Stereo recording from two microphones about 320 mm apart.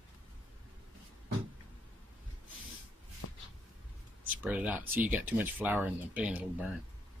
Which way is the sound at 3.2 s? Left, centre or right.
Left.